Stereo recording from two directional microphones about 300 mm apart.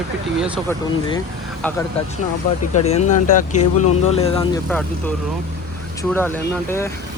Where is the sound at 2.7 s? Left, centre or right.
Left.